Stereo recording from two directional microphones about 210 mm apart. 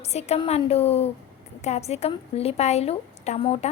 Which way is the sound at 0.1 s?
30° left (ahead or behind).